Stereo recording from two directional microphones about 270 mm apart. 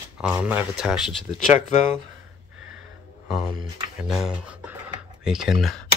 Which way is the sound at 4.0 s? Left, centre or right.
Centre.